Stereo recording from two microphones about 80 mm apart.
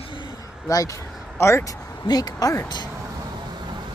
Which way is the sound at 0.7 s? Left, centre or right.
Left.